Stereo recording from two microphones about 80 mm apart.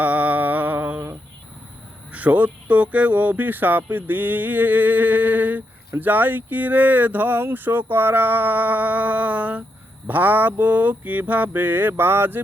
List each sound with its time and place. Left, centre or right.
0.0 s humming: centre
2.1 s speech: centre